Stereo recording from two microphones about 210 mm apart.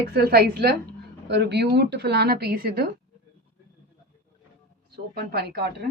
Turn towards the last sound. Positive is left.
turn(degrees=-50)  # may be behind; listen again after turning